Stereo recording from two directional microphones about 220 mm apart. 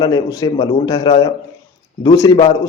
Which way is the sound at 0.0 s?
15° left (ahead or behind).